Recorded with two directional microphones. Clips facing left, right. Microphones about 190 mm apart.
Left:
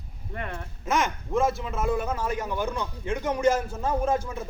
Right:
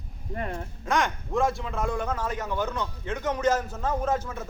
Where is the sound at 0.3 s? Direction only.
35° right (ahead or behind).